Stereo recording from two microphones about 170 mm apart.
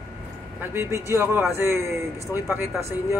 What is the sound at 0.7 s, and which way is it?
Speech, 15° right (ahead or behind).